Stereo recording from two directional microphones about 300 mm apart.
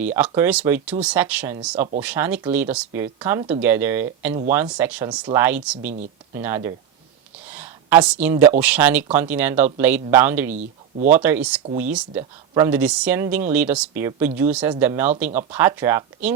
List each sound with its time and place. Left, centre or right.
0.2 s speech: centre
7.5 s a sound: centre
8.6 s speech: centre
10.5 s speech: right
11.1 s speech: centre